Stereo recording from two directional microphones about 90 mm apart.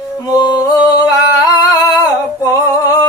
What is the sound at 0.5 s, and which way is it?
Music, 50° left (ahead or behind).